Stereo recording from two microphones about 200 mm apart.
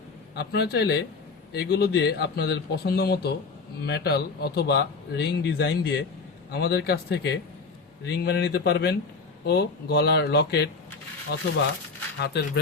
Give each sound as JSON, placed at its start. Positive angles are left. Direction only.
{"t": 0.3, "sound": "speech", "side_deg": 55}